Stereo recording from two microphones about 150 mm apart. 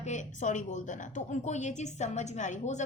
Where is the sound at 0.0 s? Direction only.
55° left (ahead or behind).